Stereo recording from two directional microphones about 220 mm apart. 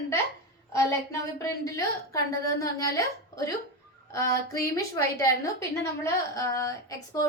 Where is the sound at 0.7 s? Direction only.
15° left (ahead or behind).